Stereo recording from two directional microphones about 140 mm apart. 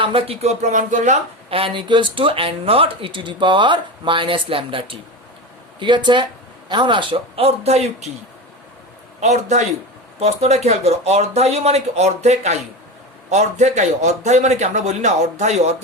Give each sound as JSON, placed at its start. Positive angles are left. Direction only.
{"t": 0.0, "sound": "speech", "side_deg": -40}
{"t": 9.2, "sound": "a man's voice", "side_deg": -55}